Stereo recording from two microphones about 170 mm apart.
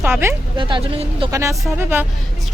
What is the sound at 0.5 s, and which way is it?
Speech, 30° right (ahead or behind).